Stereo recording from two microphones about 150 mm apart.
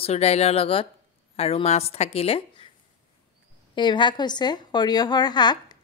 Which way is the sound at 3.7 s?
30° left (ahead or behind).